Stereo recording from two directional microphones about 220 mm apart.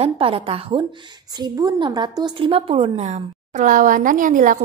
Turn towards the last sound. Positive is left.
turn(degrees=-35)  # may be behind; listen again after turning